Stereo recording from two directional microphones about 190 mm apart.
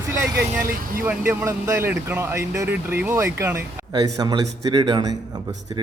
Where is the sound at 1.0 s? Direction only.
10° right (ahead or behind).